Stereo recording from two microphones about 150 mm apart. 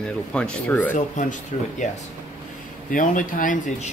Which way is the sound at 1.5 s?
50° left (ahead or behind).